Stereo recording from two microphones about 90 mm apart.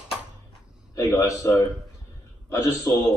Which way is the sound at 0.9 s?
35° left (ahead or behind).